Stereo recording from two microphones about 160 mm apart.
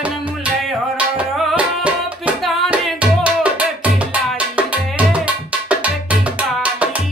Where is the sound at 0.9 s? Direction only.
10° right (ahead or behind).